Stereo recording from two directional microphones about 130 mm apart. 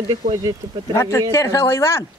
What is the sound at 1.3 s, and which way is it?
Speech, 25° left (ahead or behind).